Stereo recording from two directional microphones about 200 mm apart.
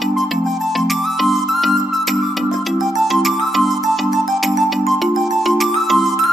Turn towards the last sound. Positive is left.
turn(degrees=0)  # may be behind; listen again after turning